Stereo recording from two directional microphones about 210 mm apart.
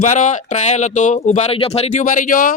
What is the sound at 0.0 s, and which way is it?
Speech, 35° left (ahead or behind).